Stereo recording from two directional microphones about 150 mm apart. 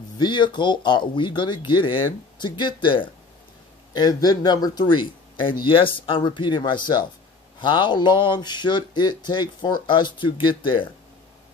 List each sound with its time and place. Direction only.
0.2 s speech: 30° left (ahead or behind)